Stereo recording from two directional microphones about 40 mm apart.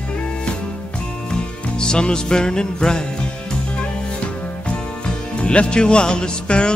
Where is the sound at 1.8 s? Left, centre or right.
Left.